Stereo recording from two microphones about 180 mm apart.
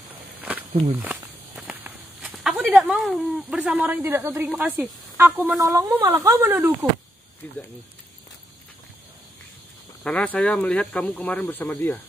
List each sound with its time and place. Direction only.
0.4 s walk: 10° right (ahead or behind)
4.5 s speech: 5° right (ahead or behind)
7.4 s speech: 10° left (ahead or behind)
10.0 s speech: 5° left (ahead or behind)